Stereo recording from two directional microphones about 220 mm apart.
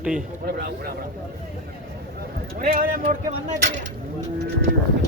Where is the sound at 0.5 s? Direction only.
45° right (ahead or behind).